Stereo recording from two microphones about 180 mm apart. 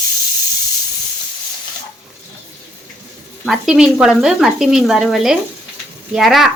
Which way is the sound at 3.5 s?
5° right (ahead or behind).